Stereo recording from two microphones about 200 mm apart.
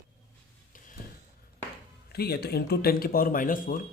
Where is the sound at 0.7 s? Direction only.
40° left (ahead or behind).